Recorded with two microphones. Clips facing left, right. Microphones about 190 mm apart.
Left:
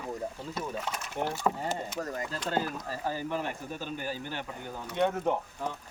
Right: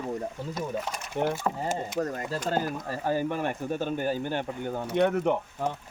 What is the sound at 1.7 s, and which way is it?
Speech, 50° right (ahead or behind).